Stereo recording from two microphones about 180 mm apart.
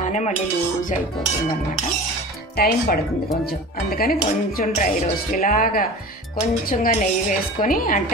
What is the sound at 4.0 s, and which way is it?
Speech, 55° left (ahead or behind).